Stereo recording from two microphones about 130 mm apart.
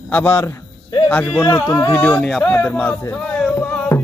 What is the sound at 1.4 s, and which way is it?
Music, 25° left (ahead or behind).